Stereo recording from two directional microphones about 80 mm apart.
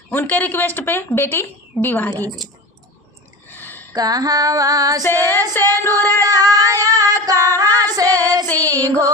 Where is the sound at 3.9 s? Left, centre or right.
Right.